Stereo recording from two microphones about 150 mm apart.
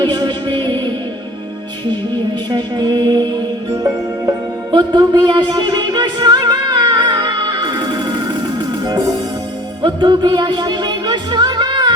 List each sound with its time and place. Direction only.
0.0 s music: 30° right (ahead or behind)
2.5 s music: 30° right (ahead or behind)
9.8 s speech: 30° right (ahead or behind)